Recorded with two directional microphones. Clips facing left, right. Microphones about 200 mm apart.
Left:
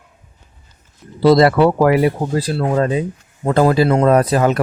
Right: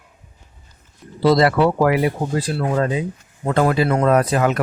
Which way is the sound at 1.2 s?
40° left (ahead or behind).